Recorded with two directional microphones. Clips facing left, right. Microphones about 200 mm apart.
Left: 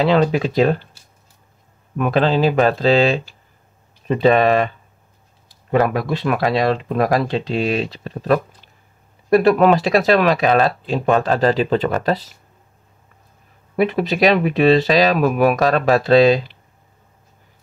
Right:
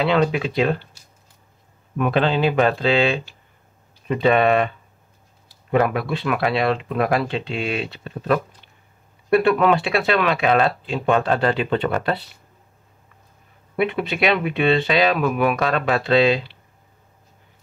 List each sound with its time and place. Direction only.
0.0 s speech: 35° left (ahead or behind)
2.0 s speech: 40° left (ahead or behind)
5.7 s speech: 35° left (ahead or behind)
13.7 s speech: 35° left (ahead or behind)